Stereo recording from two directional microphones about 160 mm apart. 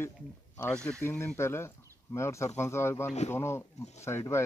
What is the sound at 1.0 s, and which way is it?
Speech, 15° left (ahead or behind).